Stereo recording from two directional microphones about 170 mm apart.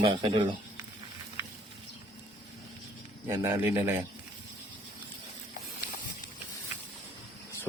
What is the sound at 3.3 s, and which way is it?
Speech, 15° right (ahead or behind).